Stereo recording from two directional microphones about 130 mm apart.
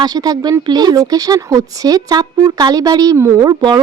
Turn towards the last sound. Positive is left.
turn(degrees=-35)  # may be behind; listen again after turning